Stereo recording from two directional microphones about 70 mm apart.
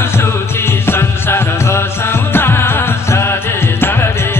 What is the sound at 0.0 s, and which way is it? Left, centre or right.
Music, left.